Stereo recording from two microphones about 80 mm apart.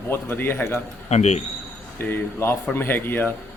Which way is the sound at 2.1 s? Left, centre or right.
Left.